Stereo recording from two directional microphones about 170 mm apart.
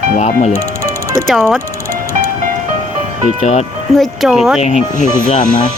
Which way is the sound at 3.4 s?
40° left (ahead or behind).